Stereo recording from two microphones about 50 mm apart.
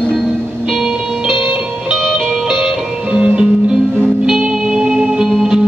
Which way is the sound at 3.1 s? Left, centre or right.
Right.